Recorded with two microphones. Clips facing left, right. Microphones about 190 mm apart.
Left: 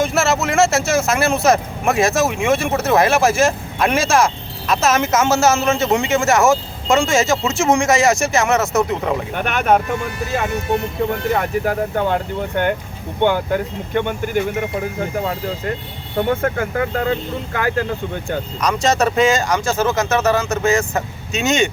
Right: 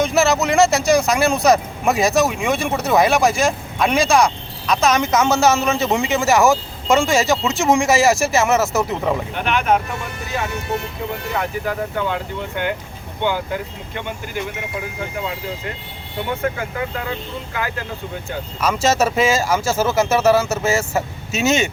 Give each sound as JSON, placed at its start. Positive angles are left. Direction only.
{"t": 0.0, "sound": "speech", "side_deg": 0}
{"t": 9.3, "sound": "speech", "side_deg": 50}
{"t": 11.1, "sound": "speech", "side_deg": 50}
{"t": 13.9, "sound": "speech", "side_deg": 50}
{"t": 18.6, "sound": "speech", "side_deg": -5}